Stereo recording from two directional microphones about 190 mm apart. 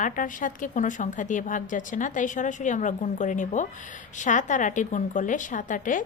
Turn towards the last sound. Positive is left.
turn(degrees=45)  # may be behind; listen again after turning